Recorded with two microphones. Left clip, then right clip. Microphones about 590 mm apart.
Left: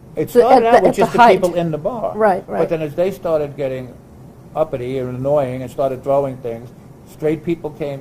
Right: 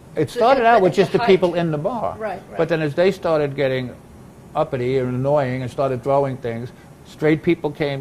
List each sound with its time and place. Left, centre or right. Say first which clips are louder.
0.1 s speech: left 5 dB; right